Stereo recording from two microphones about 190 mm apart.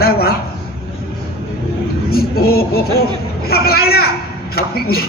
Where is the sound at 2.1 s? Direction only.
55° left (ahead or behind).